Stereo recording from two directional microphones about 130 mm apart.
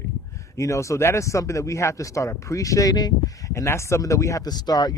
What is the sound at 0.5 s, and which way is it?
Speech, 25° left (ahead or behind).